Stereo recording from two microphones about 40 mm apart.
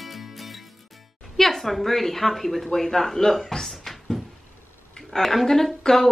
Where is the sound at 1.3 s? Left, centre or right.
Centre.